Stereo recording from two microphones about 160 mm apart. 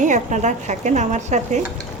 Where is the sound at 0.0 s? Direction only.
50° right (ahead or behind).